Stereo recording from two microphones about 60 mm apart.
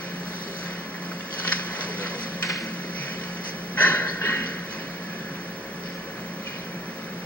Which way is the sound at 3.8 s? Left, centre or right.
Left.